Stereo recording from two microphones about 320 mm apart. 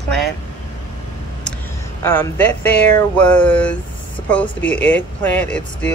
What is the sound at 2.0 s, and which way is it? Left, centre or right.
Speech, centre.